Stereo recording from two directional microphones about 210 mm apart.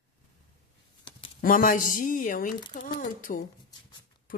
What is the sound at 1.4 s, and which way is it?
Speech, 40° left (ahead or behind).